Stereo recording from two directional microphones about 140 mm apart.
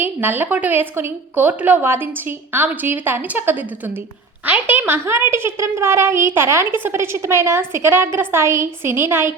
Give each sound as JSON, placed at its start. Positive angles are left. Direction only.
{"t": 0.0, "sound": "a woman's voice", "side_deg": -15}